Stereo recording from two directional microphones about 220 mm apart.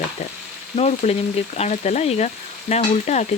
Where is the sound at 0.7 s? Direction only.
30° left (ahead or behind).